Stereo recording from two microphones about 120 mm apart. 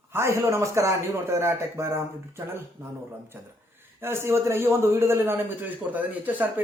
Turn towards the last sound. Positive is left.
turn(degrees=-15)  # may be behind; listen again after turning